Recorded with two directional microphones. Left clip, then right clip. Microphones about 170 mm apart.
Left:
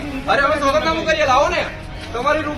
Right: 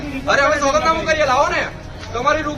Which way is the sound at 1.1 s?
35° left (ahead or behind).